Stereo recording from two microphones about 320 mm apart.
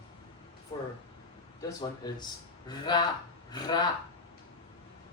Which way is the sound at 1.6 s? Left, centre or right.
Centre.